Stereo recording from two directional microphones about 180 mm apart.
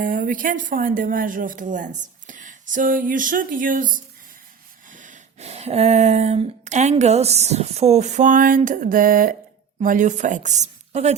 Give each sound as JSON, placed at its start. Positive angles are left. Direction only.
{"t": 0.0, "sound": "speech", "side_deg": -50}
{"t": 4.9, "sound": "a sound", "side_deg": -45}
{"t": 9.8, "sound": "speech", "side_deg": -45}